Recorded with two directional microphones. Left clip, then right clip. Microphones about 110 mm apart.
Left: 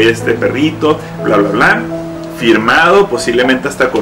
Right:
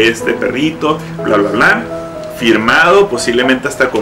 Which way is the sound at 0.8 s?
10° right (ahead or behind).